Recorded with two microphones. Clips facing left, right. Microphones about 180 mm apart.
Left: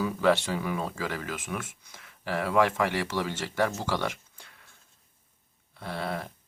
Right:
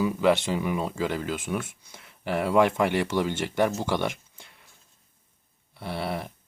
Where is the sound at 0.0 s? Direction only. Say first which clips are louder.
Right 2 dB; 15° right (ahead or behind).